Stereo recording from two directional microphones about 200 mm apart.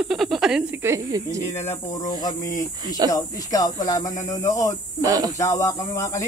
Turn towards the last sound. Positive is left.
turn(degrees=15)  # may be behind; listen again after turning